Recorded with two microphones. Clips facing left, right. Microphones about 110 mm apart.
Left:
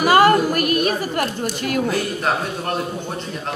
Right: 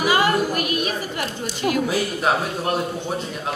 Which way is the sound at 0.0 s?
50° left (ahead or behind).